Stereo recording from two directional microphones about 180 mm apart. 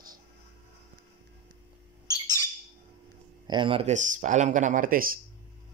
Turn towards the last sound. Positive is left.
turn(degrees=-50)  # may be behind; listen again after turning